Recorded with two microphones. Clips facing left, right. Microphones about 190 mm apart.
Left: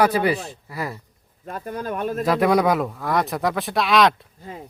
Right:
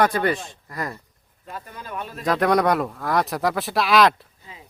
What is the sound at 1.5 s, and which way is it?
Speech, 50° left (ahead or behind).